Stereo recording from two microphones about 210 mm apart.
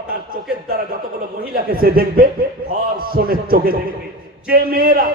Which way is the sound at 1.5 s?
45° right (ahead or behind).